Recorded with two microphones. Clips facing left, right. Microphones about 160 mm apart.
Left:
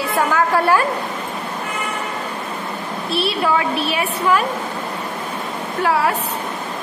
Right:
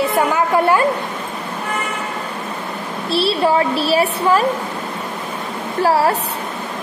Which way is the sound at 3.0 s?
30° right (ahead or behind).